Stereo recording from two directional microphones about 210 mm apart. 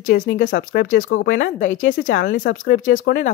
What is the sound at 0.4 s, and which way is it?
Speech, 45° left (ahead or behind).